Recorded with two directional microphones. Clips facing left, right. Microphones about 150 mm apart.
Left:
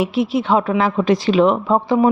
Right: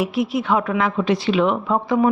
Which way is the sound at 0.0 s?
25° left (ahead or behind).